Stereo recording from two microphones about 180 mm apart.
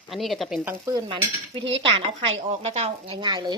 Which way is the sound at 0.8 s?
25° right (ahead or behind).